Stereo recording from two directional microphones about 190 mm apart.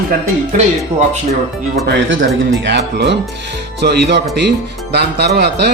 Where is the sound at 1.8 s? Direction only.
75° right (ahead or behind).